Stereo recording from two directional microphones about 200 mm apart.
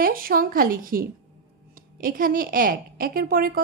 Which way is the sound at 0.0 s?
45° right (ahead or behind).